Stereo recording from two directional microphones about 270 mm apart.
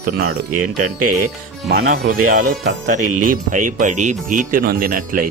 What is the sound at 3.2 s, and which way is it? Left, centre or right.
Speech, right.